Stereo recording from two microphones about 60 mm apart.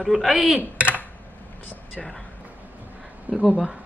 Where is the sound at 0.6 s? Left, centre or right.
Right.